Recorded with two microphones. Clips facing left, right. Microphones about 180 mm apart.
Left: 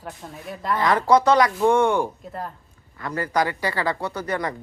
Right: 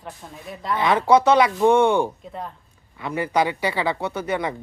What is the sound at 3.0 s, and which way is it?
Speech, 20° right (ahead or behind).